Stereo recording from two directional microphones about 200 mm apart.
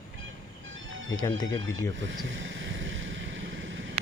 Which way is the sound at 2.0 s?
70° right (ahead or behind).